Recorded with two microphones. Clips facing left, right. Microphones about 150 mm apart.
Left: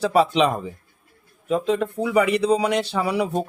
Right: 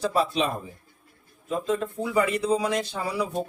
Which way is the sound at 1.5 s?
75° left (ahead or behind).